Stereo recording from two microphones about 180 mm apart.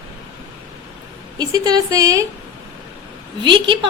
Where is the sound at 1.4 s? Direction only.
20° right (ahead or behind).